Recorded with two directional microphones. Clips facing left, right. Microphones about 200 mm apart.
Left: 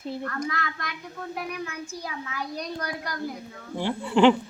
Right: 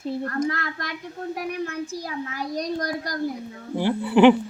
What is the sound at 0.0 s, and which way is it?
A child's voice, 35° right (ahead or behind).